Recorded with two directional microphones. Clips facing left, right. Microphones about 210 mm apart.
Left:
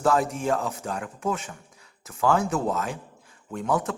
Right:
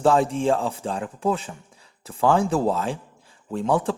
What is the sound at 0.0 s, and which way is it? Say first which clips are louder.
A man's voice: right 4 dB; 30° right (ahead or behind).